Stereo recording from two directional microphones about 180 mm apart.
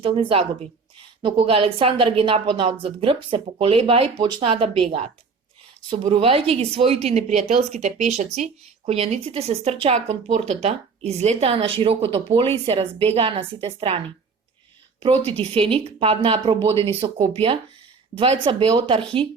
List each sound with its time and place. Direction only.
0.0 s a woman's voice: 30° right (ahead or behind)
15.3 s speech: 30° right (ahead or behind)